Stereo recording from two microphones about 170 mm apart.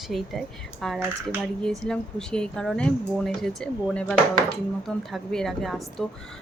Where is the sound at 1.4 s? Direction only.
Centre (ahead or behind).